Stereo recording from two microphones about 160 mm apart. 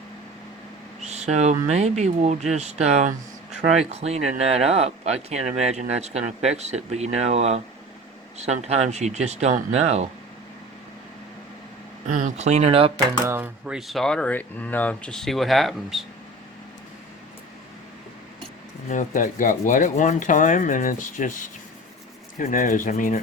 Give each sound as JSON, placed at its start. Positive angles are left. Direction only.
{"t": 1.0, "sound": "speech", "side_deg": -45}
{"t": 12.0, "sound": "speech", "side_deg": -50}
{"t": 13.2, "sound": "speech", "side_deg": -10}
{"t": 18.9, "sound": "speech", "side_deg": 55}